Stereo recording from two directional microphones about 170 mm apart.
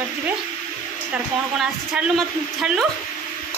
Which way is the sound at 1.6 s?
5° right (ahead or behind).